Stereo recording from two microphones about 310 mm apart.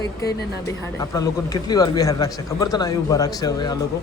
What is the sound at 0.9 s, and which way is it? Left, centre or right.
Speech, centre.